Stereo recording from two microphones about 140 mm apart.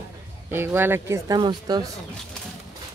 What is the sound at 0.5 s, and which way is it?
Speech, 15° right (ahead or behind).